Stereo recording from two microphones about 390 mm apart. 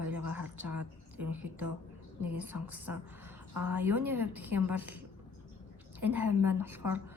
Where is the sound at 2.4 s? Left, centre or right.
Right.